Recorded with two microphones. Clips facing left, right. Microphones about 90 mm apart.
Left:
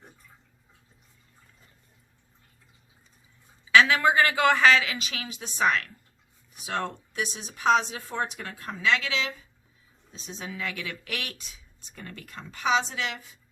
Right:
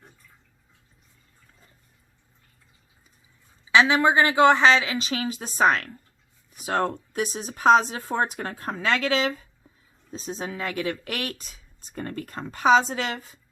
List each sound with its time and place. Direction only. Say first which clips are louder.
3.7 s speech: right 1 dB; 20° right (ahead or behind); by 13.4 s 45° right (ahead or behind)